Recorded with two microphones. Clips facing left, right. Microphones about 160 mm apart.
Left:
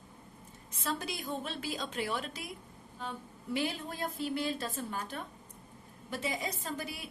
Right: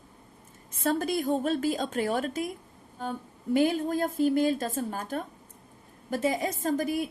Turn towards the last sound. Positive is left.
turn(degrees=-45)  # may be behind; listen again after turning